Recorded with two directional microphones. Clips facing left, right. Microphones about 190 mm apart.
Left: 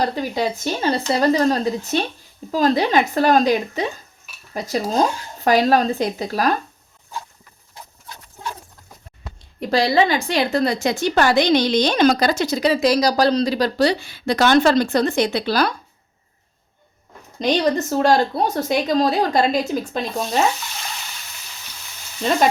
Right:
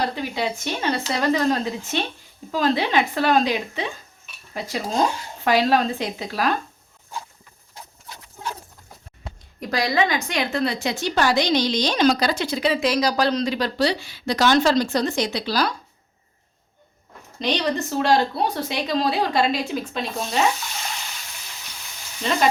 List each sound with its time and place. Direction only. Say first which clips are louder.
0.0 s speech: left 4 dB; 40° left (ahead or behind)
9.6 s a woman's voice: left 5 dB; 30° left (ahead or behind); by 15.7 s 55° left (ahead or behind)
17.4 s a woman's voice: left 5 dB; 40° left (ahead or behind)